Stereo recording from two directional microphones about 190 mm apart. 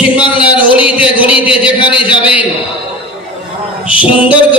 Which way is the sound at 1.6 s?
5° right (ahead or behind).